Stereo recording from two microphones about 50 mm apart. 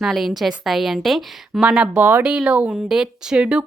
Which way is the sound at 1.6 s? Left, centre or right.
Centre.